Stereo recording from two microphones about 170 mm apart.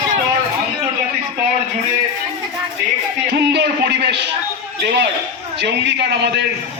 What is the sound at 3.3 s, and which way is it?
Speech, 85° right.